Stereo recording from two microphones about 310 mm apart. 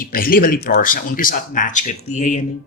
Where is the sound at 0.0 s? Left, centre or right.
Left.